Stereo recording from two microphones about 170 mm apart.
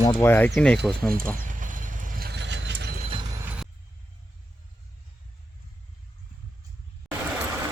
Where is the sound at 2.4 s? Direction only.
90° right.